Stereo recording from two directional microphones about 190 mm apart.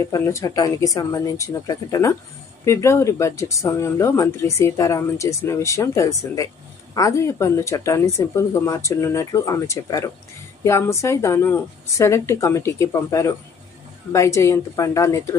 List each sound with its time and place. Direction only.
0.0 s speech: 15° left (ahead or behind)